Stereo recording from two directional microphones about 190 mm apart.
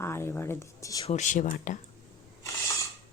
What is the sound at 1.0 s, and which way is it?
Speech, 40° left (ahead or behind).